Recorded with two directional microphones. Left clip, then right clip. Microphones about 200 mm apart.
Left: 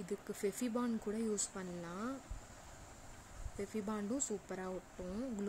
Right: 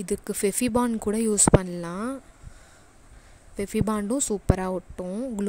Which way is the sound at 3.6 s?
45° right (ahead or behind).